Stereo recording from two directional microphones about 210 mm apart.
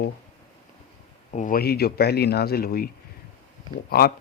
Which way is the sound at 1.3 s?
40° left (ahead or behind).